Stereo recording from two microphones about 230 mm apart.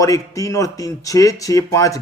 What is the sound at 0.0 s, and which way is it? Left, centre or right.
Speech, centre.